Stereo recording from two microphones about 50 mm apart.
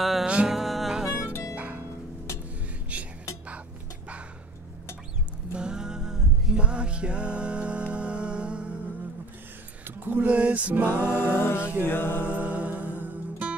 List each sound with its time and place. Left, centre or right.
0.0 s music: centre
1.1 s music: left
1.5 s music: right
2.9 s music: right
5.5 s music: centre
9.8 s a sound: right
10.2 s music: right
10.9 s music: left
12.3 s music: right